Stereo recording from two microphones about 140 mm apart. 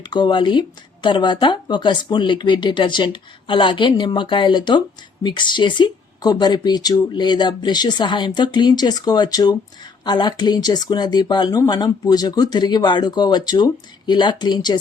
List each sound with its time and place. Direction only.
0.1 s a woman's voice: 35° left (ahead or behind)